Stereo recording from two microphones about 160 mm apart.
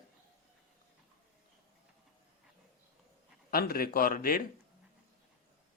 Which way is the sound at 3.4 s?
65° left (ahead or behind).